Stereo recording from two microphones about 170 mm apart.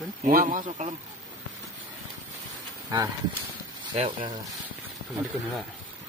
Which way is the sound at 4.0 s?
30° right (ahead or behind).